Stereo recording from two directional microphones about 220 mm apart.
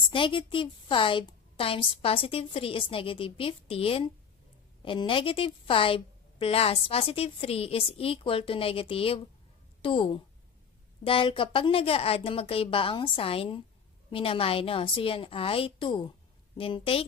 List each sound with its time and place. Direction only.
0.0 s a woman's voice: 25° left (ahead or behind)